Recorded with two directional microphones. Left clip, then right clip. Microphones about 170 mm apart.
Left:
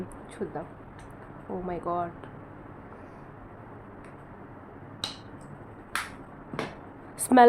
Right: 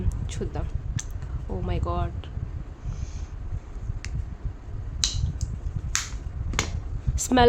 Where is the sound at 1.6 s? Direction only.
40° right (ahead or behind).